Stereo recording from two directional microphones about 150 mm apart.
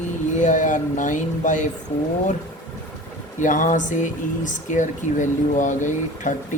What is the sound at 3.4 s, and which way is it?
Speech, 60° left (ahead or behind).